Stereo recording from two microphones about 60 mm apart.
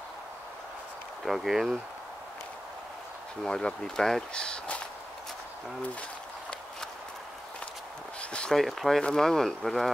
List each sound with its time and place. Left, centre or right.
1.2 s speech: centre
3.4 s speech: centre
8.2 s a sound: centre
8.5 s speech: centre